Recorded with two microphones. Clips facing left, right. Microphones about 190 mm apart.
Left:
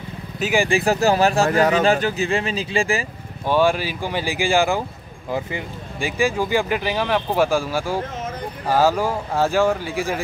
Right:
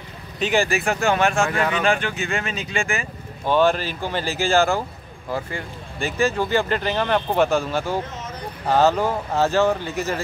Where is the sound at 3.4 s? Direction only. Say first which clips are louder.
Even; 10° left (ahead or behind).